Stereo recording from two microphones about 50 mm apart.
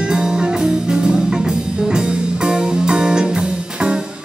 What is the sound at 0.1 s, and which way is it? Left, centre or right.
Music, centre.